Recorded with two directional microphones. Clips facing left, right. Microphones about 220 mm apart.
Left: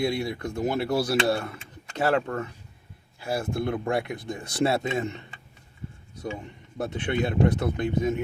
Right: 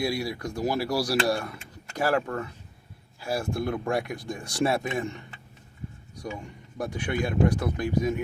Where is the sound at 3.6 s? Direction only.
25° left (ahead or behind).